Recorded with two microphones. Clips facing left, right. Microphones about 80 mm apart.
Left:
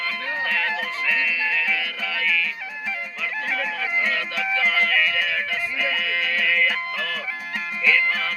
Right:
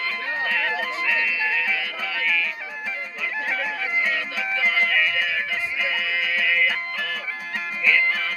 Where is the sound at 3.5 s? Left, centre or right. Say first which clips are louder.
Even; centre.